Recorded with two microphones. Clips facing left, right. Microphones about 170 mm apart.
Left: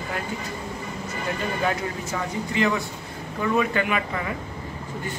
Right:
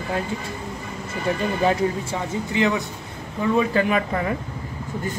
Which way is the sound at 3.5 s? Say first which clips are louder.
Right 4 dB; 35° right (ahead or behind).